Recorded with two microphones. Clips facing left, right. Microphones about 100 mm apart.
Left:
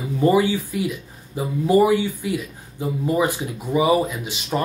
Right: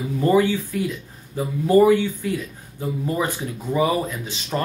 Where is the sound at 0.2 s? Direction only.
10° left (ahead or behind).